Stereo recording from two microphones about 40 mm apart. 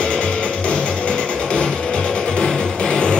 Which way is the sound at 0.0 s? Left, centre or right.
Left.